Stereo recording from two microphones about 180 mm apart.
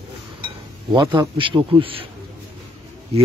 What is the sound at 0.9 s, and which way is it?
Speech, 25° right (ahead or behind).